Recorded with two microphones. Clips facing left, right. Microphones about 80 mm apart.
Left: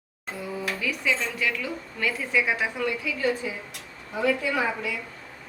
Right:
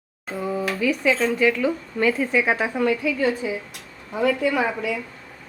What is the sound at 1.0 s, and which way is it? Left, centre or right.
Speech, right.